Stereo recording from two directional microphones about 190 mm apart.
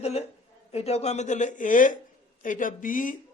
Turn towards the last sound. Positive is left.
turn(degrees=45)  # may be behind; listen again after turning